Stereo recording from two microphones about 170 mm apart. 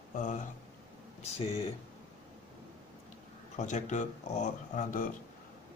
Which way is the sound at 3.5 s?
45° left (ahead or behind).